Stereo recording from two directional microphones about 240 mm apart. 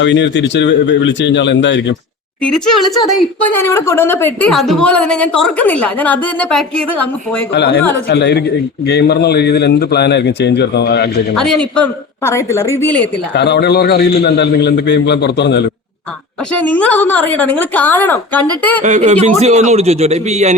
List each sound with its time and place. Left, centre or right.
0.0 s a man's voice: left
2.4 s a woman's voice: centre
7.5 s a man's voice: left
11.3 s a woman's voice: centre
13.3 s a man's voice: left
16.6 s a woman's voice: centre
18.9 s a man's voice: right